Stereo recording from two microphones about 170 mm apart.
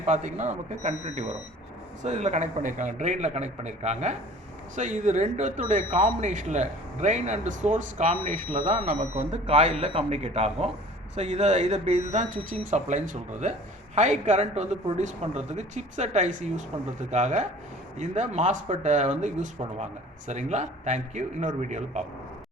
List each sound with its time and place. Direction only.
0.0 s speech: 45° right (ahead or behind)